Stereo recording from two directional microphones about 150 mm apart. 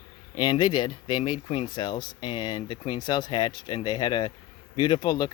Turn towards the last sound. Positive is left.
turn(degrees=30)  # may be behind; listen again after turning